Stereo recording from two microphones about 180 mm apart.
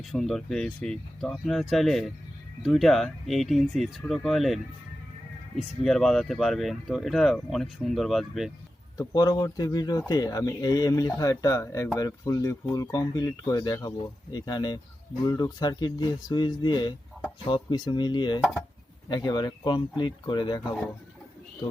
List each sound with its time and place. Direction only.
0.0 s speech: centre (ahead or behind)
9.0 s speech: 20° left (ahead or behind)